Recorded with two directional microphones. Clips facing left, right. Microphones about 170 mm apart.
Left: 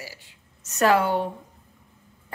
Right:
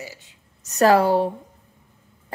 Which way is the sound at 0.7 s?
35° right (ahead or behind).